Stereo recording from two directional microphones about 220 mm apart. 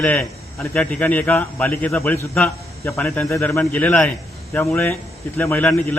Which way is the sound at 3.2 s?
15° left (ahead or behind).